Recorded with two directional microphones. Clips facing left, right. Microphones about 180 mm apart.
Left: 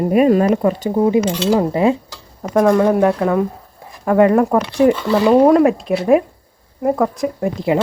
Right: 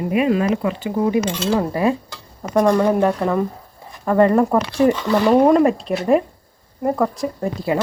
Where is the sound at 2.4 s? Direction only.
5° left (ahead or behind).